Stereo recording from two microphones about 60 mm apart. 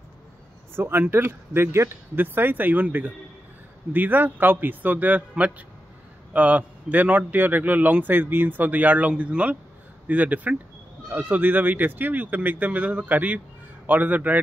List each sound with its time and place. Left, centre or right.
0.7 s a man's voice: right
2.1 s a man's voice: right
6.3 s a man's voice: right